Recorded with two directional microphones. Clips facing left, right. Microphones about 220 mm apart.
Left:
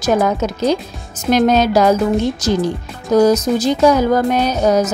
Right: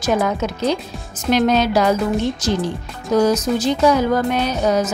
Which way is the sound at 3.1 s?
40° left (ahead or behind).